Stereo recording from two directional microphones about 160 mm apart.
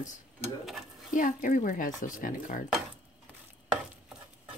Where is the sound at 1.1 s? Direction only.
55° left (ahead or behind).